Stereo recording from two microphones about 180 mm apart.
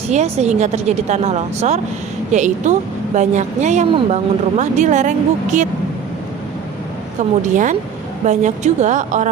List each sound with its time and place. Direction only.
0.1 s speech: 40° right (ahead or behind)
7.2 s a woman's voice: 45° right (ahead or behind)